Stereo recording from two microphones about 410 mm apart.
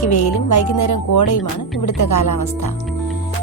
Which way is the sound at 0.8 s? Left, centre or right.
Left.